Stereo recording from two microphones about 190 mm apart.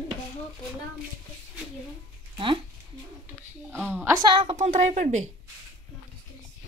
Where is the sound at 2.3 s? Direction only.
25° right (ahead or behind).